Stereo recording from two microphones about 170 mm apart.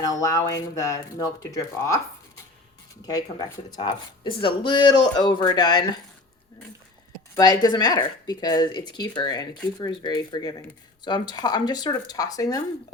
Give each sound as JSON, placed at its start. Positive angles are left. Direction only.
{"t": 0.0, "sound": "speech", "side_deg": 20}
{"t": 3.0, "sound": "speech", "side_deg": 25}
{"t": 7.3, "sound": "speech", "side_deg": 20}